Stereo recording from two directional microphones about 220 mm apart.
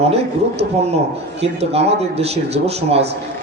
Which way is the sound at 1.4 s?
30° right (ahead or behind).